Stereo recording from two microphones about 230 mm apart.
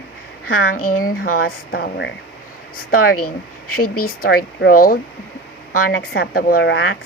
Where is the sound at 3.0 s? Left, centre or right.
Left.